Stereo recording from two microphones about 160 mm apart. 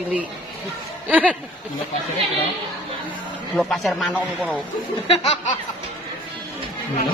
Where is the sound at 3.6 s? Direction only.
Centre (ahead or behind).